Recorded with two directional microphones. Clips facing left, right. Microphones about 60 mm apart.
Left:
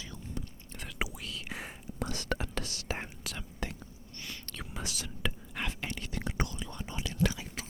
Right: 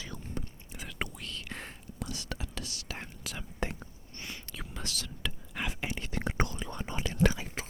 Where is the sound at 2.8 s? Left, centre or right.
Left.